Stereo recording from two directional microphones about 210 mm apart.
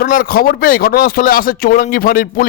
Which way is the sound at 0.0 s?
45° left (ahead or behind).